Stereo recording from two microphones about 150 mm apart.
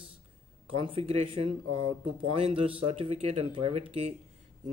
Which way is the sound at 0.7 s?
40° right (ahead or behind).